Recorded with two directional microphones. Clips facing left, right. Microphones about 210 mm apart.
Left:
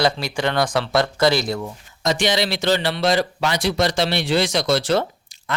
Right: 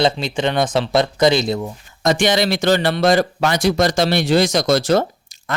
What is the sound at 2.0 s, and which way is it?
Speech, 50° right (ahead or behind).